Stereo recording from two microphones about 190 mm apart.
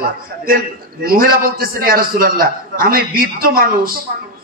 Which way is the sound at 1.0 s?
50° right (ahead or behind).